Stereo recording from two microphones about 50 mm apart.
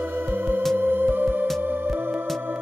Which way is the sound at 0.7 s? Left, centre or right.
Right.